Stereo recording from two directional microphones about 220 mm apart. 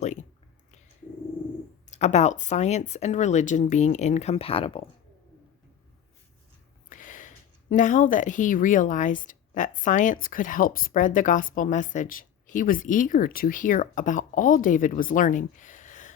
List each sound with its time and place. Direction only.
0.0 s a sound: 35° left (ahead or behind)
1.9 s speech: 30° left (ahead or behind)
6.9 s speech: 35° left (ahead or behind)